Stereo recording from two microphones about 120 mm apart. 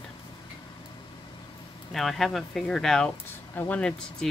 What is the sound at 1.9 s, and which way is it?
Speech, centre (ahead or behind).